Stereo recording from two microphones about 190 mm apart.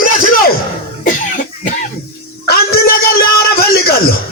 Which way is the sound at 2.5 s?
55° left (ahead or behind).